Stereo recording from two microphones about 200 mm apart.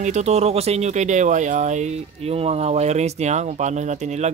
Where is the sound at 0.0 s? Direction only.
35° right (ahead or behind).